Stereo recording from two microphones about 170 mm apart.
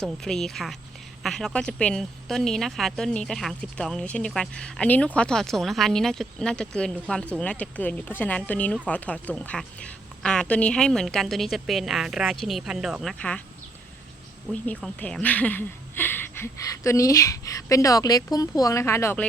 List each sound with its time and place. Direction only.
0.0 s a woman's voice: 5° left (ahead or behind)
14.5 s speech: 10° left (ahead or behind)